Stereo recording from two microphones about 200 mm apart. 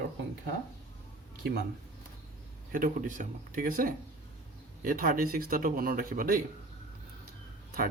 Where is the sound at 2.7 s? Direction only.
40° right (ahead or behind).